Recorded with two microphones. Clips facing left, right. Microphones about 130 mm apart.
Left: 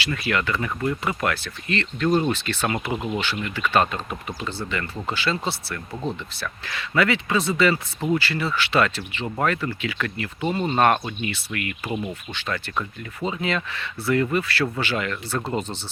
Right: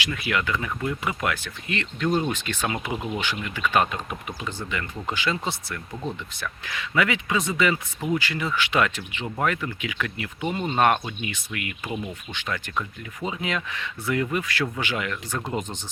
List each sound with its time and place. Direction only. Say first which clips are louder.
0.0 s speech: left 2 dB; 15° right (ahead or behind)